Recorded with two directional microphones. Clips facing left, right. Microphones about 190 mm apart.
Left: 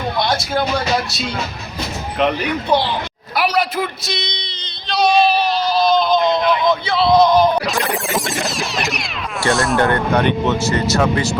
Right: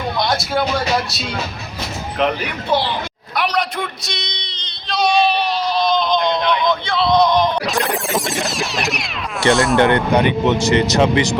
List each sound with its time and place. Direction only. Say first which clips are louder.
0.3 s speech: even; centre (ahead or behind)
2.1 s speech: left 2 dB; centre (ahead or behind)
3.3 s a sound: left 2 dB; 5° left (ahead or behind)
9.5 s speech: right 3 dB; centre (ahead or behind)
9.7 s speech: right 2 dB; 20° right (ahead or behind)